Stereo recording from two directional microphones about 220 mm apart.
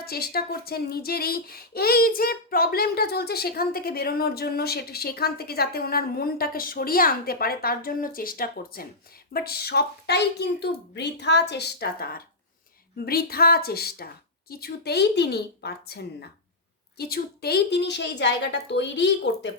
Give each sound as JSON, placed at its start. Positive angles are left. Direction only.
{"t": 0.0, "sound": "speech", "side_deg": 45}